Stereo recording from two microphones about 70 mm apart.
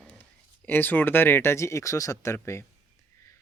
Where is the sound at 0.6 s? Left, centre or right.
Left.